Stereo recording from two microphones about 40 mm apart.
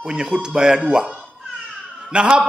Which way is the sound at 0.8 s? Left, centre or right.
Right.